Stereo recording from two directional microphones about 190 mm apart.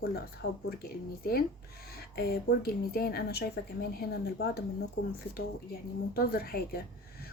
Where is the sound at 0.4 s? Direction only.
55° left (ahead or behind).